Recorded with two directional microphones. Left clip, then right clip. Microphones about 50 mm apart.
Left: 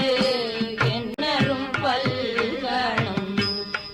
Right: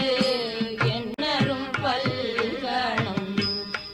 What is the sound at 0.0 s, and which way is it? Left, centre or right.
Music, left.